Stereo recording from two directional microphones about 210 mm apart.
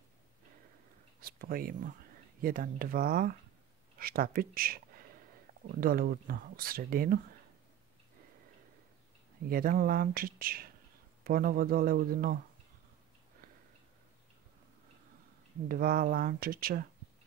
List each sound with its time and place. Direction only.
1.2 s speech: 45° right (ahead or behind)
9.5 s speech: 45° right (ahead or behind)
15.7 s speech: 45° right (ahead or behind)